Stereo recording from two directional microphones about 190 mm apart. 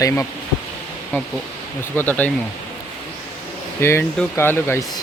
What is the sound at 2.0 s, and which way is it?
Speech, 10° left (ahead or behind).